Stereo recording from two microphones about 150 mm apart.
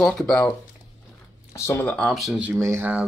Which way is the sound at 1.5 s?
20° left (ahead or behind).